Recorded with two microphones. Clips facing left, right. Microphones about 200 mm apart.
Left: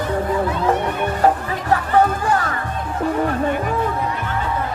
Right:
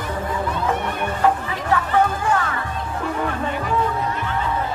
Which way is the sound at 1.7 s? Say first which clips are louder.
Left 1 dB; 35° left (ahead or behind).